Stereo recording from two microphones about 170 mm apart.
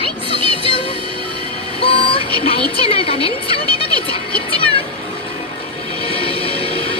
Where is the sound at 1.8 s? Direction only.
35° left (ahead or behind).